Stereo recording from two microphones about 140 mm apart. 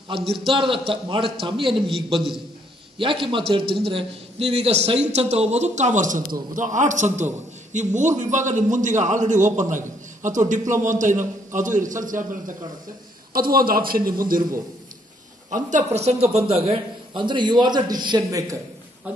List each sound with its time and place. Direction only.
0.2 s a man's voice: centre (ahead or behind)
0.5 s a man's voice: 35° right (ahead or behind)
1.7 s a man's voice: centre (ahead or behind)
3.0 s a man's voice: 35° right (ahead or behind); by 12.5 s 70° right (ahead or behind)
13.3 s a man's voice: 90° right
15.5 s a man's voice: 55° right (ahead or behind); by 18.6 s 25° right (ahead or behind)
19.1 s speech: 10° right (ahead or behind)